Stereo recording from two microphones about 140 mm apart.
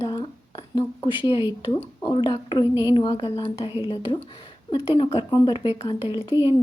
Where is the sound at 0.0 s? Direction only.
35° left (ahead or behind).